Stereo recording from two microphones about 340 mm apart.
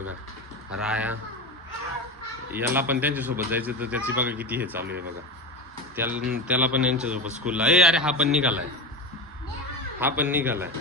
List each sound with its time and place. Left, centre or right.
0.8 s speech: centre
2.5 s speech: centre
4.8 s speech: right
6.0 s speech: centre
10.0 s speech: centre